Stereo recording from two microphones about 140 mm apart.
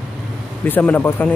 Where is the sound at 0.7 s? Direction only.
15° left (ahead or behind).